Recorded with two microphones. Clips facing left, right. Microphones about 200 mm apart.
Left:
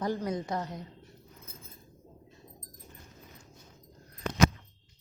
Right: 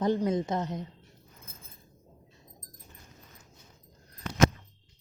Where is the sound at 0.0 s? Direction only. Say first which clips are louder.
Right 5 dB; 20° right (ahead or behind).